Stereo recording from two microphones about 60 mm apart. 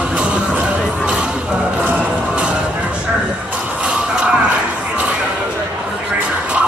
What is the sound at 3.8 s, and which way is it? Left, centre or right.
Music, centre.